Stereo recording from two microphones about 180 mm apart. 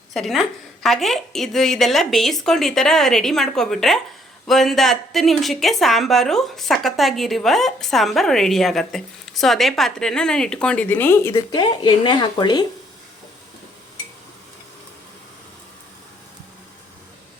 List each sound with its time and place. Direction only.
0.1 s a woman's voice: centre (ahead or behind)
11.6 s speech: 25° left (ahead or behind)